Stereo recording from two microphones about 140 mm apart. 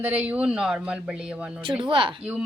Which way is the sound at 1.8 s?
35° right (ahead or behind).